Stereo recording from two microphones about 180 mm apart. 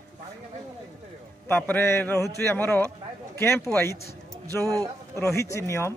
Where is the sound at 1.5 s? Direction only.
10° left (ahead or behind).